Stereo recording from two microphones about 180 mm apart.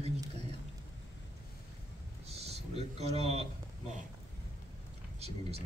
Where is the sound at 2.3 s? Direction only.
35° right (ahead or behind).